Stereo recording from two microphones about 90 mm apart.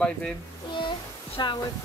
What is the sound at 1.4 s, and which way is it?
Speech, 55° left (ahead or behind).